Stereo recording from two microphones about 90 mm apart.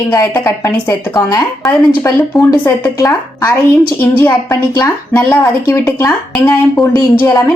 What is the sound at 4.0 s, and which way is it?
Speech, 25° left (ahead or behind).